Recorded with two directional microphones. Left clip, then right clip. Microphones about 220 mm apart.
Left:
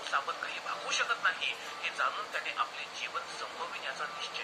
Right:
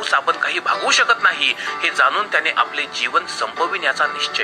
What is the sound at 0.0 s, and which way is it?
Speech, 50° right (ahead or behind).